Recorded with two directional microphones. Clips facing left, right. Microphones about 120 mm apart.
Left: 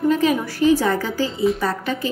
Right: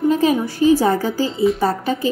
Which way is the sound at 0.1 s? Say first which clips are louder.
Right 2 dB; 35° right (ahead or behind).